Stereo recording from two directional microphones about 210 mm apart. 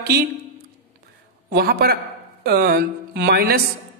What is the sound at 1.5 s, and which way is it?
Speech, 50° right (ahead or behind).